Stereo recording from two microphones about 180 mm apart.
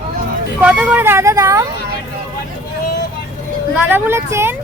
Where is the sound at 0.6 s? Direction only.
5° right (ahead or behind).